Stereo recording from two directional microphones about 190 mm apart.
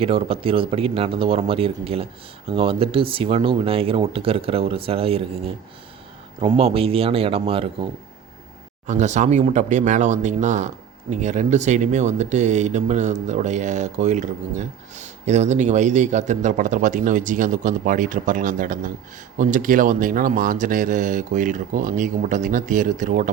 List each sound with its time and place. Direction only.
0.0 s speech: 30° right (ahead or behind)
8.9 s speech: 40° right (ahead or behind)